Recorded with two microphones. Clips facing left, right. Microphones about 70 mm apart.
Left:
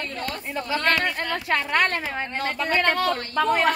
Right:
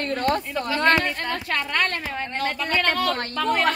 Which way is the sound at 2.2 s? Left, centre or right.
Centre.